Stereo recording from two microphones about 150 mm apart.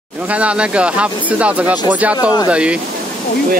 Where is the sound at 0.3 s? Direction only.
10° right (ahead or behind).